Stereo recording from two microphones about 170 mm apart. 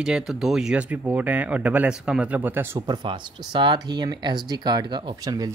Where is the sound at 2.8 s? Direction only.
25° right (ahead or behind).